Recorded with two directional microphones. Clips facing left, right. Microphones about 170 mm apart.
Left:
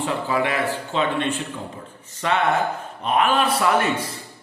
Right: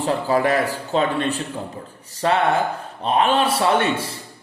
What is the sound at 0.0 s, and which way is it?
A man's voice, 40° right (ahead or behind).